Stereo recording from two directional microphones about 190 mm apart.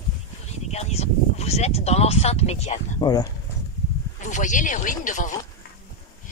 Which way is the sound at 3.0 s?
20° left (ahead or behind).